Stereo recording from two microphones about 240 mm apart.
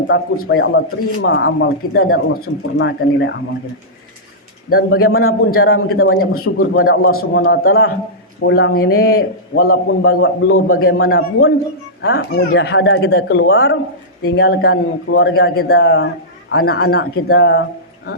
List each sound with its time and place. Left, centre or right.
0.1 s speech: left
4.9 s a man's voice: left
6.7 s speech: left
7.0 s a man's voice: left
8.4 s speech: left
9.0 s a man's voice: left
12.0 s speech: left